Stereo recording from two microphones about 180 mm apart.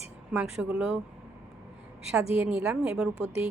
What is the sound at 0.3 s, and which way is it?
Speech, 5° right (ahead or behind).